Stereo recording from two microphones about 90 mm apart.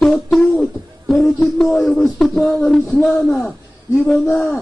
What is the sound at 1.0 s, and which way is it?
Speech, 5° left (ahead or behind).